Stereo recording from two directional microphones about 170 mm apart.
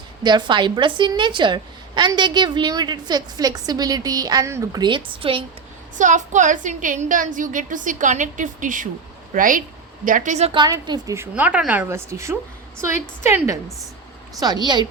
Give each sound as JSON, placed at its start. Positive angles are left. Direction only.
{"t": 0.2, "sound": "a woman's voice", "side_deg": -25}
{"t": 6.0, "sound": "a woman's voice", "side_deg": -45}
{"t": 10.6, "sound": "a woman's voice", "side_deg": -25}